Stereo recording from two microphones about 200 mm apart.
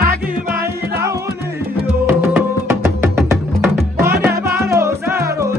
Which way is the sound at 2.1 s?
10° right (ahead or behind).